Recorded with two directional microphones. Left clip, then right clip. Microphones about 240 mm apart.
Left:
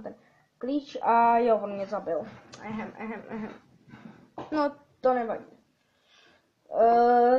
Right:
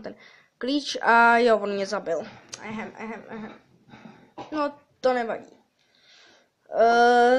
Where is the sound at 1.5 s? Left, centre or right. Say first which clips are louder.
Right 3 dB; right.